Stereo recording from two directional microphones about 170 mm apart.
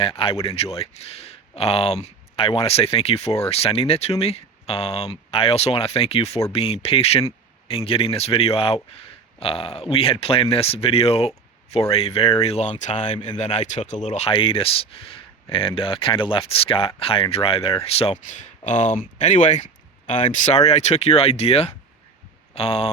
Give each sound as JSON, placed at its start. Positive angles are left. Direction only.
{"t": 0.0, "sound": "speech", "side_deg": 30}